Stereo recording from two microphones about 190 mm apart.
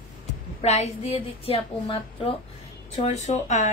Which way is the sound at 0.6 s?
35° left (ahead or behind).